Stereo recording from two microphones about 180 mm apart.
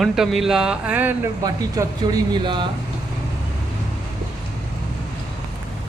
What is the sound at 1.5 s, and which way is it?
Speech, 20° right (ahead or behind).